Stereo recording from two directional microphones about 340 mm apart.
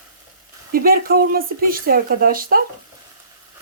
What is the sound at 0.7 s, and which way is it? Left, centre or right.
Speech, right.